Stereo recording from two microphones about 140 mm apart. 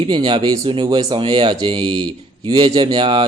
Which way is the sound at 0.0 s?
35° right (ahead or behind).